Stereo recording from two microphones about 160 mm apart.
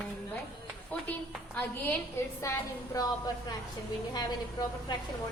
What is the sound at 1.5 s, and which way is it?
A woman's voice, 10° left (ahead or behind).